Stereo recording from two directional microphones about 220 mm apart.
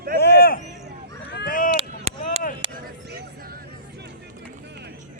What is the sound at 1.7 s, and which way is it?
Chop, 30° right (ahead or behind).